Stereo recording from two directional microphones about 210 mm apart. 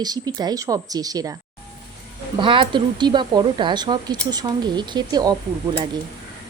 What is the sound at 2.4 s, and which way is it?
Speech, 25° right (ahead or behind).